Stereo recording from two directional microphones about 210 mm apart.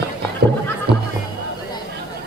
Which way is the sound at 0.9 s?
50° right (ahead or behind).